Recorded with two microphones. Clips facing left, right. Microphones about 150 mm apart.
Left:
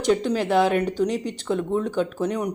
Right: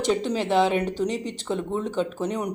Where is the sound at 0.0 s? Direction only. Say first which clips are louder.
Left 3 dB; centre (ahead or behind).